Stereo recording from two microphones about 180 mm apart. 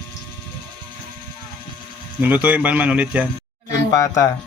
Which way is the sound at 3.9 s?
20° left (ahead or behind).